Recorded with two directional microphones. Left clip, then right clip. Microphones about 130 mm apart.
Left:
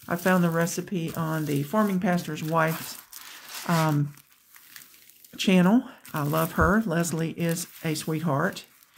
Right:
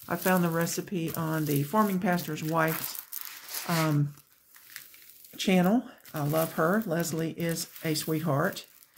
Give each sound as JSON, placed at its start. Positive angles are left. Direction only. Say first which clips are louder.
{"t": 0.0, "sound": "speech", "louder": "left 3 dB", "side_deg": 25}
{"t": 3.6, "sound": "speech", "louder": "left 4 dB", "side_deg": 45}
{"t": 5.3, "sound": "speech", "louder": "left 3 dB", "side_deg": 30}